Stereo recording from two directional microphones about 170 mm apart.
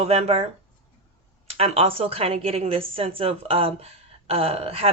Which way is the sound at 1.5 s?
35° right (ahead or behind).